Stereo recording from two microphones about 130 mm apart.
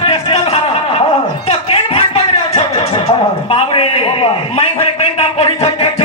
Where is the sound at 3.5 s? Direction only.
50° left (ahead or behind).